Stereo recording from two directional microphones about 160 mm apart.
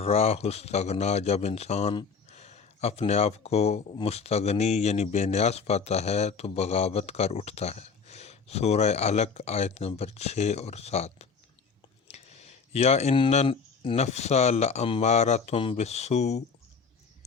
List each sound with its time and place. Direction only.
0.0 s speech: 40° left (ahead or behind)
12.0 s a sound: 45° left (ahead or behind)
13.3 s speech: 40° left (ahead or behind)